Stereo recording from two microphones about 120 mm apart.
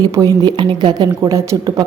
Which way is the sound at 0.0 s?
30° right (ahead or behind).